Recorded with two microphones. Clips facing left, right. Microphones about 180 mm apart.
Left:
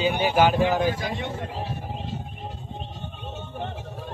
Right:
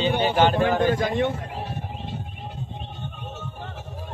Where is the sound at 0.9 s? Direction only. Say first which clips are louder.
Right 6 dB; 55° right (ahead or behind).